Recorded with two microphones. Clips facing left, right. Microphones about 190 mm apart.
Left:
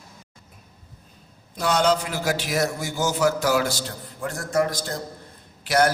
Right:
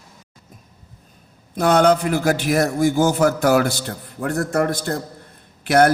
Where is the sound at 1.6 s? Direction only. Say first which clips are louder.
Right 6 dB; 55° right (ahead or behind).